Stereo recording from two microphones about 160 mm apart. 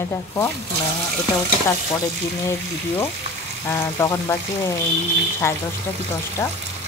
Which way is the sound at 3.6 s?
15° left (ahead or behind).